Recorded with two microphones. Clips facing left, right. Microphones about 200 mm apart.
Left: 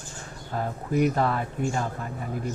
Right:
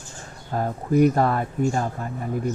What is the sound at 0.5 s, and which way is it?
Speech, 45° right (ahead or behind).